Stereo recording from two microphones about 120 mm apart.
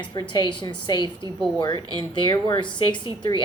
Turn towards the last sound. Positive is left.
turn(degrees=40)  # may be behind; listen again after turning